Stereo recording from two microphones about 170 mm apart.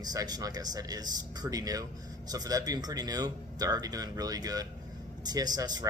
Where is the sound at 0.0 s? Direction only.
20° right (ahead or behind).